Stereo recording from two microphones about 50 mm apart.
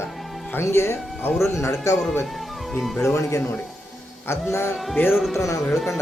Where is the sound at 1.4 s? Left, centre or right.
Left.